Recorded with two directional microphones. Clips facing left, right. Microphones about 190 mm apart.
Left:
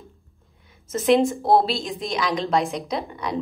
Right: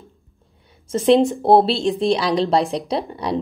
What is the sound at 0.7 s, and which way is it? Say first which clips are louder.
A woman's voice: right 4 dB; 30° right (ahead or behind).